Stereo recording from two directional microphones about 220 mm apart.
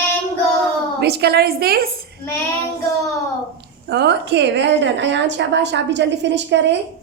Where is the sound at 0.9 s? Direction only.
45° right (ahead or behind).